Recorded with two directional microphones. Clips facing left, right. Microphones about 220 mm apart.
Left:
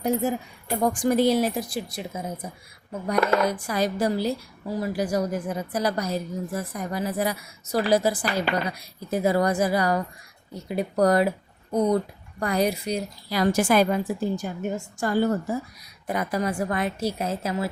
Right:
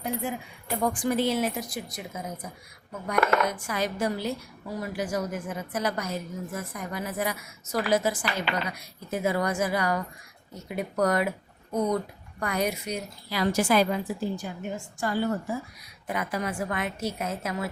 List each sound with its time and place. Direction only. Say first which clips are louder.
0.0 s a woman's voice: left 7 dB; 40° left (ahead or behind)